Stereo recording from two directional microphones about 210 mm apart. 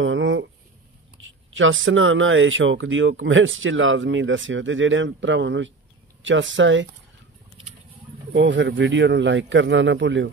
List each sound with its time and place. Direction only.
0.0 s a sound: 65° right (ahead or behind)
1.2 s speech: 65° right (ahead or behind)
8.3 s speech: 60° right (ahead or behind)